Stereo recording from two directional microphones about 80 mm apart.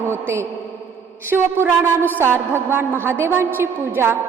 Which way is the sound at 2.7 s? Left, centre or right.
Right.